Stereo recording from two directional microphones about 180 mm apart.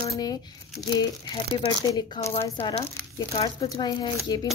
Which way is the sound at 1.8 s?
20° left (ahead or behind).